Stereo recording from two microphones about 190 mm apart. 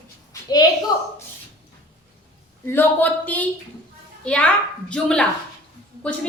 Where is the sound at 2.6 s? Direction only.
10° left (ahead or behind).